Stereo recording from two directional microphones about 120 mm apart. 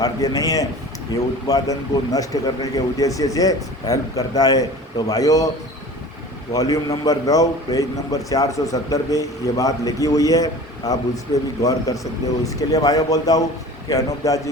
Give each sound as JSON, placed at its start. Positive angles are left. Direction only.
{"t": 0.0, "sound": "a man's voice", "side_deg": 30}
{"t": 6.5, "sound": "a man's voice", "side_deg": 30}